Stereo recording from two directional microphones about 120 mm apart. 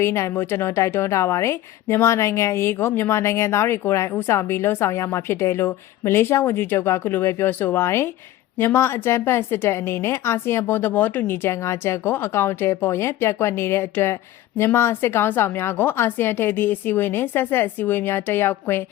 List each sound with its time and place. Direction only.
0.0 s a woman's voice: 20° left (ahead or behind)